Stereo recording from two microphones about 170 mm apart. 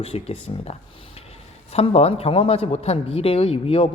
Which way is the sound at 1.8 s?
35° left (ahead or behind).